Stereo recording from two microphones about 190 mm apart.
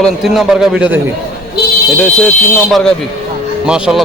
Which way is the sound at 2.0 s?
5° left (ahead or behind).